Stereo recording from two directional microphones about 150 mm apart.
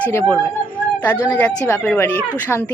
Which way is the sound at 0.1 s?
15° left (ahead or behind).